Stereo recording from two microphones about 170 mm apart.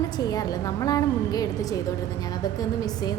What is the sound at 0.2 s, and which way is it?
A woman's voice, 20° left (ahead or behind).